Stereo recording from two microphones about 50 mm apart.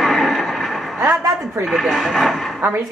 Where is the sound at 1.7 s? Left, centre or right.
Centre.